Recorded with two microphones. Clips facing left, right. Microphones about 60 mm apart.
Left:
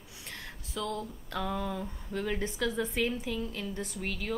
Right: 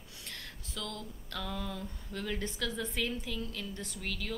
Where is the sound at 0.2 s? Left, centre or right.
Centre.